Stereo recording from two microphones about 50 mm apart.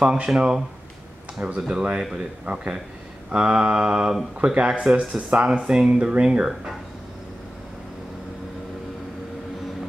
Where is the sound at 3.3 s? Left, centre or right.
Right.